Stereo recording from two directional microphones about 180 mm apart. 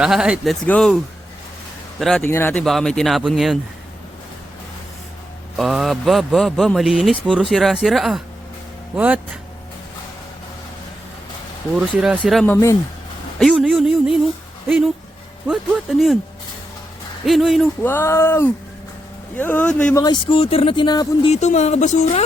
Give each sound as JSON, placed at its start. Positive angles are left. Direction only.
{"t": 0.0, "sound": "speech", "side_deg": -5}
{"t": 2.0, "sound": "speech", "side_deg": 0}
{"t": 2.2, "sound": "speech", "side_deg": 10}
{"t": 5.5, "sound": "speech", "side_deg": 0}
{"t": 11.9, "sound": "speech", "side_deg": -5}
{"t": 13.4, "sound": "a sound", "side_deg": 0}
{"t": 14.7, "sound": "speech", "side_deg": 0}
{"t": 15.4, "sound": "music", "side_deg": 0}
{"t": 17.2, "sound": "speech", "side_deg": 0}
{"t": 17.8, "sound": "speech", "side_deg": 15}
{"t": 20.0, "sound": "speech", "side_deg": 25}
{"t": 21.2, "sound": "speech", "side_deg": 40}